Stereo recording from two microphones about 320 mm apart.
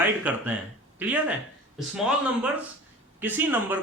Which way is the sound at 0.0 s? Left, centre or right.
Centre.